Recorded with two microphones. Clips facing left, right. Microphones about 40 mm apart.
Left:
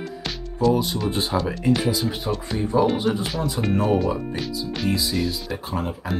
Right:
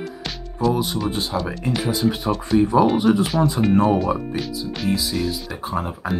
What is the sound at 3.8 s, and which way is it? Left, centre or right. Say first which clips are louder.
Speech: right 2 dB; centre.